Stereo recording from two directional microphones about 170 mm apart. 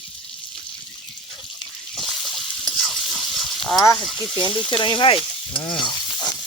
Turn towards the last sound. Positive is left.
turn(degrees=25)  # may be behind; listen again after turning